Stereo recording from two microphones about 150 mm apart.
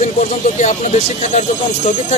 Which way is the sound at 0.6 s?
50° left (ahead or behind).